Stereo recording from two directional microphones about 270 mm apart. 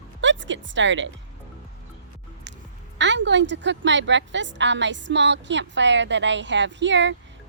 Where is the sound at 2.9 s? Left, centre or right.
Right.